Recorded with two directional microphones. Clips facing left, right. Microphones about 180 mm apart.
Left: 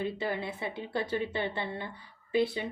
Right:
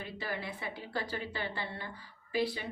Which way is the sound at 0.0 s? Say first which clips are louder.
Left 7 dB; 25° left (ahead or behind).